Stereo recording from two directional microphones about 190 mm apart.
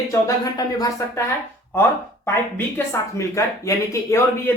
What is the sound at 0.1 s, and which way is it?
Speech, 20° left (ahead or behind).